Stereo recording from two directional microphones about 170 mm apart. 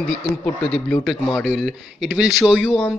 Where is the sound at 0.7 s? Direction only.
5° left (ahead or behind).